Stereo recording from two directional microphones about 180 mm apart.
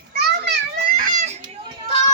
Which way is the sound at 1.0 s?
45° right (ahead or behind).